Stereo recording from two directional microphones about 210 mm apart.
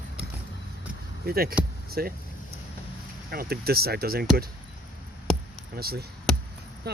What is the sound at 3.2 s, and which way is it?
Speech, 45° right (ahead or behind).